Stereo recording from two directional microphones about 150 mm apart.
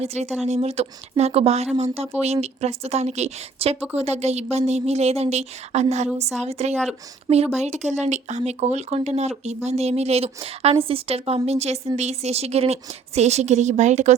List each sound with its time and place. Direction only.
0.0 s a woman's voice: 45° right (ahead or behind)